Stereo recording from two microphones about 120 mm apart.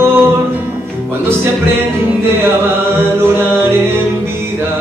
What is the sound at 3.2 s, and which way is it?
Music, 20° right (ahead or behind).